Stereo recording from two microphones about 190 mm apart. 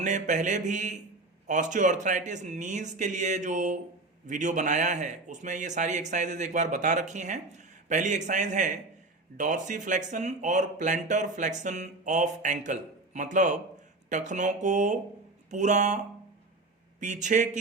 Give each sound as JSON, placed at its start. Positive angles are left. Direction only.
{"t": 0.0, "sound": "a man's voice", "side_deg": -40}
{"t": 17.0, "sound": "a man's voice", "side_deg": -40}